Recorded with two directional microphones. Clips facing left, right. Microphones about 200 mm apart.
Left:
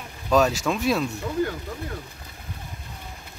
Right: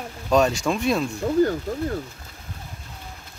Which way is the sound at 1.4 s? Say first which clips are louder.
Right 7 dB; 40° right (ahead or behind).